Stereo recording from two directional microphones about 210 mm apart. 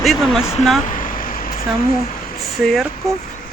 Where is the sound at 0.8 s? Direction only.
40° left (ahead or behind).